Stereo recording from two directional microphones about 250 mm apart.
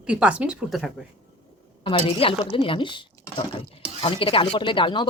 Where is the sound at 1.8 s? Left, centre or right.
Left.